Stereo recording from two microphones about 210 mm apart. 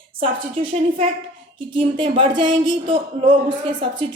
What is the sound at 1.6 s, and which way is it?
Speech, 25° right (ahead or behind).